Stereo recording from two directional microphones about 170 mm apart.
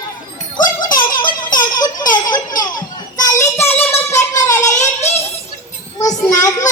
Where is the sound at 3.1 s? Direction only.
20° left (ahead or behind).